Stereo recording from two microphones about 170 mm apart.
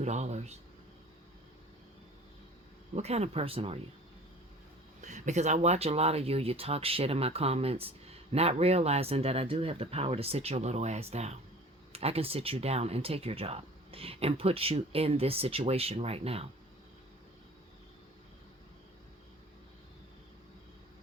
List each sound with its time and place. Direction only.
0.0 s speech: 40° right (ahead or behind)
2.9 s speech: 40° right (ahead or behind)
4.9 s speech: 45° right (ahead or behind)